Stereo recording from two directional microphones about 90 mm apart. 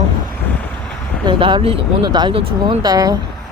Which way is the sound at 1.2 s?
70° right (ahead or behind).